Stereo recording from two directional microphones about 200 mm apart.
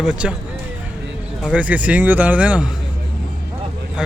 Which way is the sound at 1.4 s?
5° right (ahead or behind).